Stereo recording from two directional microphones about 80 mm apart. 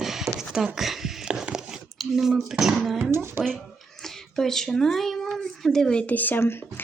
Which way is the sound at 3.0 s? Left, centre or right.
Right.